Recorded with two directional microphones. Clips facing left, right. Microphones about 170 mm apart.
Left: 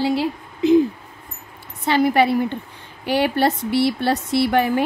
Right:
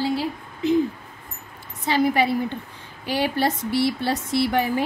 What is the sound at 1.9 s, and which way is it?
Speech, 65° left (ahead or behind).